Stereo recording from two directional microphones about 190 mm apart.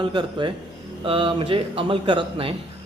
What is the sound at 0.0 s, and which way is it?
A man's voice, 25° right (ahead or behind).